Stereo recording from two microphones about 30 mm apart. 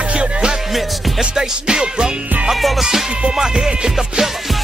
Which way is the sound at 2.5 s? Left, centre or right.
Centre.